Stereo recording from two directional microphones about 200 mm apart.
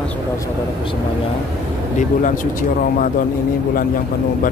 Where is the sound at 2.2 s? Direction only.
40° left (ahead or behind).